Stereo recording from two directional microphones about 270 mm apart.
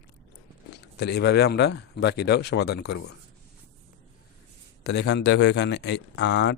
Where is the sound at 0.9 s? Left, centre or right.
Left.